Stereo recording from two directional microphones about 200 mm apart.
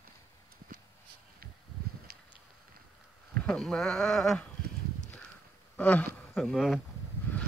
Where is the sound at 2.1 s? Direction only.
50° right (ahead or behind).